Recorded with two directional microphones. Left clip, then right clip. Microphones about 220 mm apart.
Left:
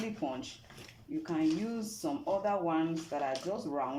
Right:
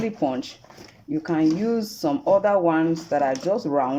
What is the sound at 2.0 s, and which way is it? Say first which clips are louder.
Speech: right 13 dB; 45° right (ahead or behind).